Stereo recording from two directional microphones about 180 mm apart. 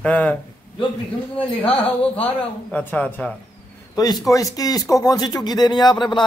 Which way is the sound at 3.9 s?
20° left (ahead or behind).